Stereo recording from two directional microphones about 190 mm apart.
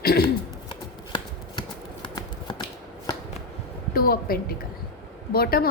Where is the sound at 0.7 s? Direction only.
25° left (ahead or behind).